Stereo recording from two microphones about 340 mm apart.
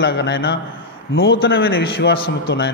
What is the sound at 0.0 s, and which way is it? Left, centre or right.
A man's voice, left.